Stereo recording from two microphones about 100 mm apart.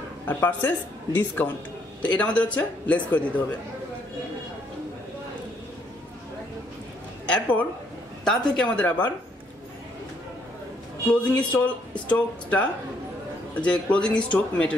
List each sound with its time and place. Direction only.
0.3 s speech: 15° left (ahead or behind)
8.2 s speech: 5° left (ahead or behind)
11.1 s speech: 15° left (ahead or behind)